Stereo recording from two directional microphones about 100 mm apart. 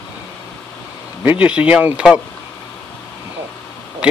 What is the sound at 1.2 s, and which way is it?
Speech, 15° right (ahead or behind).